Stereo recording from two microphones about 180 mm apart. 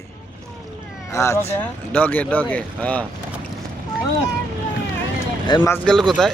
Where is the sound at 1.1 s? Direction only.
15° left (ahead or behind).